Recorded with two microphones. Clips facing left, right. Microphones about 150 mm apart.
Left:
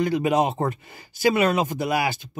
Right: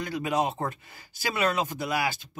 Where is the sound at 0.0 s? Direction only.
20° left (ahead or behind).